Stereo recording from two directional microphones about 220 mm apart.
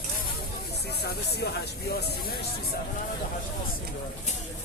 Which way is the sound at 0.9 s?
50° left (ahead or behind).